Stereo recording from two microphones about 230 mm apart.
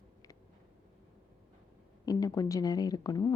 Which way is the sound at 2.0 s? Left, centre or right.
Centre.